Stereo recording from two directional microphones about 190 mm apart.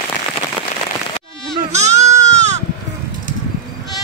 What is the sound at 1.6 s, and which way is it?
Sheep, 35° right (ahead or behind).